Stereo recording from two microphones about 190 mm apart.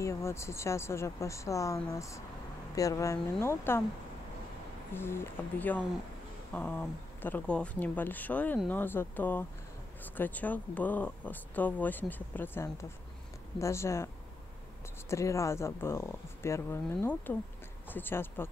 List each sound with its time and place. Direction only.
0.0 s speech: 15° left (ahead or behind)
4.9 s speech: 10° left (ahead or behind)